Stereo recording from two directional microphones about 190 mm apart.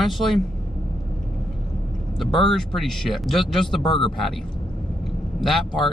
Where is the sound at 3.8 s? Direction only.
25° left (ahead or behind).